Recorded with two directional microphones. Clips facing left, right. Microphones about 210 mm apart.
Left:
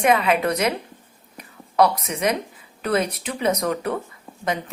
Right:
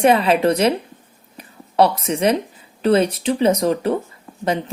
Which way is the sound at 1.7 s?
30° right (ahead or behind).